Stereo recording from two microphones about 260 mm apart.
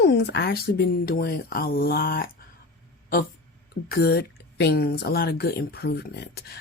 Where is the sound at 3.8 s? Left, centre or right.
Left.